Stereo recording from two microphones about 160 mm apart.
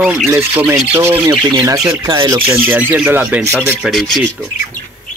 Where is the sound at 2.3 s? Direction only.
10° right (ahead or behind).